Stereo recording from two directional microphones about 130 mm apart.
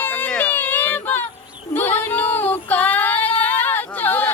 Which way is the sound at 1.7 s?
15° left (ahead or behind).